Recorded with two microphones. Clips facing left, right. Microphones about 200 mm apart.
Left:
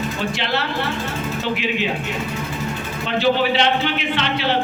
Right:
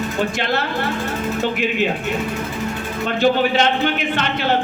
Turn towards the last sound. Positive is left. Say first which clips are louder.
# right 1 dB
turn(degrees=-50)  # may be behind; listen again after turning